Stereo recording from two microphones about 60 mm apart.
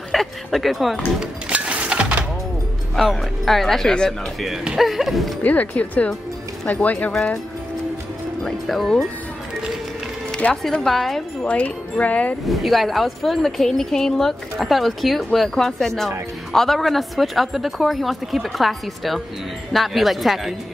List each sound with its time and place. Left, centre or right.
0.1 s speech: centre
1.5 s a sound: right
3.0 s speech: centre
4.7 s speech: centre
5.4 s speech: left
8.5 s speech: centre
10.5 s speech: centre
11.4 s speech: left
12.4 s speech: centre